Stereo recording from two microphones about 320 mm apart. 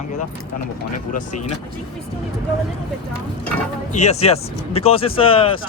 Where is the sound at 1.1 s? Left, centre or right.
Left.